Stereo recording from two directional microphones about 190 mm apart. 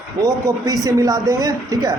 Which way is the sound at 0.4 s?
20° right (ahead or behind).